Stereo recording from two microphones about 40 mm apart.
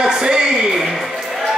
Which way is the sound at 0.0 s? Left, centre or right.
Centre.